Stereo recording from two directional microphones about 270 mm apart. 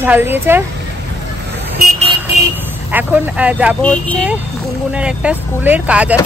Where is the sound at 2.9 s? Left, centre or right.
Centre.